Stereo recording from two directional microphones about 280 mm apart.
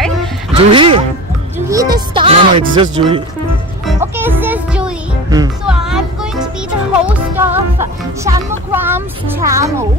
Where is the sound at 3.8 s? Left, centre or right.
Centre.